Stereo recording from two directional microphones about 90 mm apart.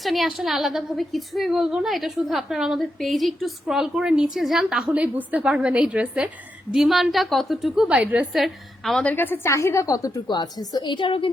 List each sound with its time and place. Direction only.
0.0 s a woman's voice: centre (ahead or behind)
4.9 s a woman's voice: 20° right (ahead or behind); by 7.9 s centre (ahead or behind)
7.9 s a woman's voice: 15° right (ahead or behind)
8.3 s a woman's voice: centre (ahead or behind)
9.0 s a woman's voice: 20° left (ahead or behind); by 10.1 s 40° left (ahead or behind)
10.2 s a woman's voice: 50° left (ahead or behind); by 11.3 s 70° left (ahead or behind)